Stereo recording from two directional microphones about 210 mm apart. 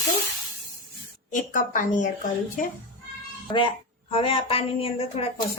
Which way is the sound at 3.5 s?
25° left (ahead or behind).